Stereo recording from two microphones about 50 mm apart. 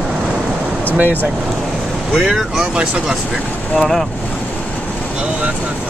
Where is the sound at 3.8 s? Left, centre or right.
Centre.